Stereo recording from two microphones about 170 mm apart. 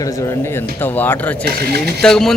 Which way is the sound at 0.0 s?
15° left (ahead or behind).